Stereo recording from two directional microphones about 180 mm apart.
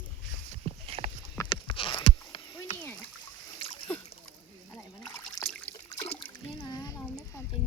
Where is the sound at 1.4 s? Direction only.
25° left (ahead or behind).